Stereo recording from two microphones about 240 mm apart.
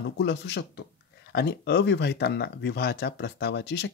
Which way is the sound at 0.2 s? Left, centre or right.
Left.